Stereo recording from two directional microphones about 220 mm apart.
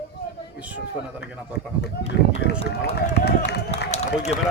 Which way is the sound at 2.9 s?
50° left (ahead or behind).